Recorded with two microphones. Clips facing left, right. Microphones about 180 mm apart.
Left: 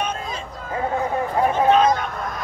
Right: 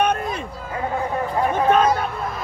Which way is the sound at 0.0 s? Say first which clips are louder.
Right 6 dB; 60° right (ahead or behind).